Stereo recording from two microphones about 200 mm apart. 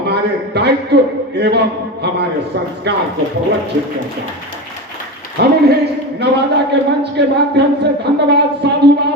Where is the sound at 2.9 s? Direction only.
55° right (ahead or behind).